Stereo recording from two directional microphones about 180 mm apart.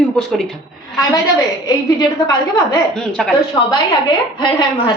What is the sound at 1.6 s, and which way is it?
A woman's voice, 20° left (ahead or behind).